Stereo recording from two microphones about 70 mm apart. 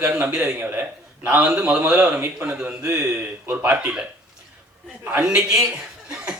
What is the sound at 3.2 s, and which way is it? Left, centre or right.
Speech, right.